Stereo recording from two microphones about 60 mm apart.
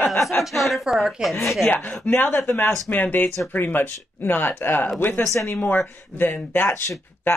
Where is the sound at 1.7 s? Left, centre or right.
Left.